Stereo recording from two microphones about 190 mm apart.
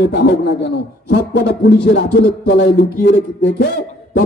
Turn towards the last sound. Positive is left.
turn(degrees=60)  # may be behind; listen again after turning